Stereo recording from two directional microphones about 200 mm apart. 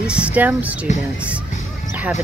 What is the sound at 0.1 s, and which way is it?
Speech, 5° right (ahead or behind).